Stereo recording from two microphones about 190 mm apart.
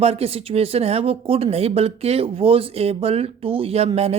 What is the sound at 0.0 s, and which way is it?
Speech, 30° right (ahead or behind).